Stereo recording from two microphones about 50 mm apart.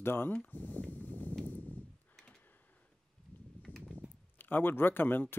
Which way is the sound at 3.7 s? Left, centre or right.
Right.